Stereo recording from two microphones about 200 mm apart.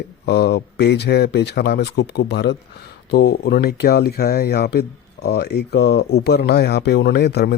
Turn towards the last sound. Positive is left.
turn(degrees=55)  # may be behind; listen again after turning